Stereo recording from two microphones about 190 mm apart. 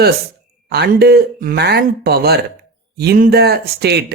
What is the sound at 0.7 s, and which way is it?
Speech, 60° right (ahead or behind).